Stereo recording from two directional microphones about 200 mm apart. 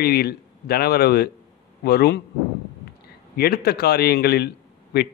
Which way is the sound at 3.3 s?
50° left (ahead or behind).